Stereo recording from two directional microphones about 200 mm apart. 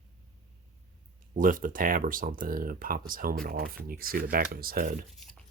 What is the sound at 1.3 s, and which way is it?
Speech, 40° right (ahead or behind).